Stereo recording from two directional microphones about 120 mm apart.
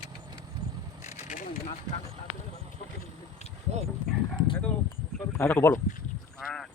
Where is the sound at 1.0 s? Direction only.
85° left.